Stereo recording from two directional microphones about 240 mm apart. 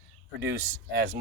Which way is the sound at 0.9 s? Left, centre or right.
Right.